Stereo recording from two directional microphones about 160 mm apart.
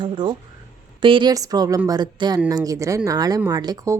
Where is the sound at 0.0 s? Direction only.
30° right (ahead or behind).